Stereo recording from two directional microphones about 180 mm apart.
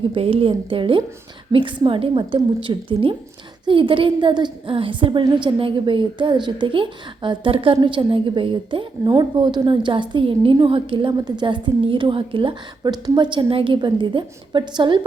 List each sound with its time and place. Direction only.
0.1 s a woman's voice: 30° right (ahead or behind)